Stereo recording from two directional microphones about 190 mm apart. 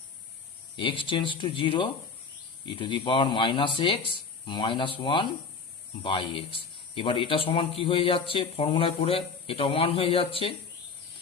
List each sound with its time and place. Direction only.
0.8 s speech: 25° left (ahead or behind)